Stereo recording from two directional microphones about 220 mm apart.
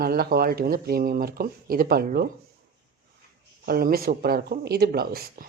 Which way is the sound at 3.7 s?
45° right (ahead or behind).